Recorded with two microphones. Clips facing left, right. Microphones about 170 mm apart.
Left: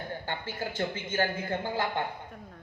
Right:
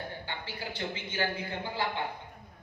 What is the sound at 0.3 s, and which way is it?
A woman's voice, 50° left (ahead or behind).